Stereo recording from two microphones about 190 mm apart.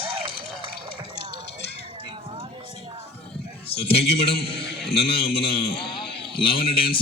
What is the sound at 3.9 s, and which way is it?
Speech, 30° left (ahead or behind).